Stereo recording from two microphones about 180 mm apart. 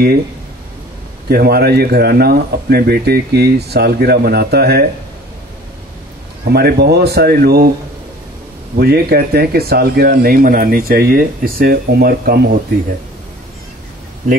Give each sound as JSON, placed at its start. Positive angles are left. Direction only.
{"t": 1.3, "sound": "speech", "side_deg": -60}
{"t": 6.4, "sound": "speech", "side_deg": -60}
{"t": 8.7, "sound": "speech", "side_deg": -60}